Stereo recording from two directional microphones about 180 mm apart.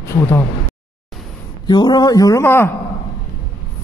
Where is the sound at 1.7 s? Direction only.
25° left (ahead or behind).